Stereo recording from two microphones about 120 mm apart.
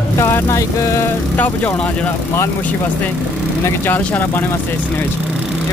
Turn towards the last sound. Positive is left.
turn(degrees=15)  # may be behind; listen again after turning